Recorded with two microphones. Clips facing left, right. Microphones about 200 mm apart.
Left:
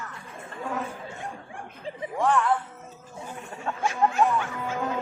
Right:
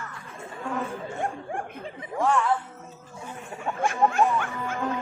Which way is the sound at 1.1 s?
55° right (ahead or behind).